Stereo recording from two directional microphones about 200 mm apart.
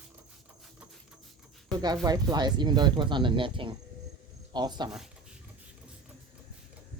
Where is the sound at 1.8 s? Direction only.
20° right (ahead or behind).